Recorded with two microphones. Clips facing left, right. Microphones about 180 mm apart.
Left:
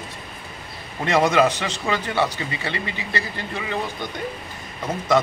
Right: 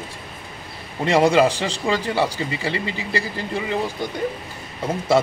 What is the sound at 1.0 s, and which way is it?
A man's voice, 30° right (ahead or behind).